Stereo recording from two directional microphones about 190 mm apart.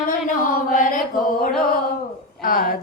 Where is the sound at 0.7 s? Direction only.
45° left (ahead or behind).